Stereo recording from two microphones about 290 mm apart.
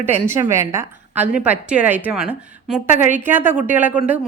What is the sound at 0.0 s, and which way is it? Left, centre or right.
A woman's voice, centre.